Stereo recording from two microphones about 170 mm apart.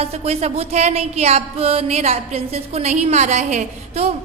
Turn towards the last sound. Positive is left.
turn(degrees=-40)  # may be behind; listen again after turning